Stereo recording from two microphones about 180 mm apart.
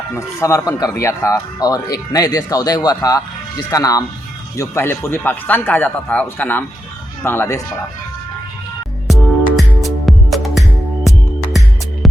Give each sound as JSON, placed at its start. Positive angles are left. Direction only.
{"t": 0.1, "sound": "a man's voice", "side_deg": 15}
{"t": 9.0, "sound": "music", "side_deg": 0}